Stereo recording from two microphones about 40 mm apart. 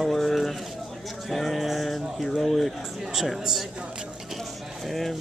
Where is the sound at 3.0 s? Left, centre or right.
Centre.